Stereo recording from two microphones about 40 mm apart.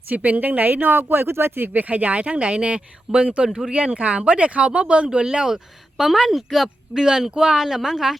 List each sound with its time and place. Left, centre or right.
0.1 s speech: right
1.3 s speech: right
1.7 s speech: right
5.2 s a woman's voice: centre
6.0 s a woman's voice: centre